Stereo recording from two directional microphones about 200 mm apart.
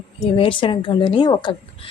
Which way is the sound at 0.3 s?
25° left (ahead or behind).